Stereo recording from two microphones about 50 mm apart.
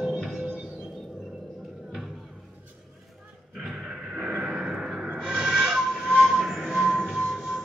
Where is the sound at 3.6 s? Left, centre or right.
Centre.